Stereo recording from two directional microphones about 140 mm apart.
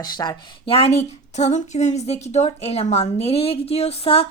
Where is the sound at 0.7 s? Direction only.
50° left (ahead or behind).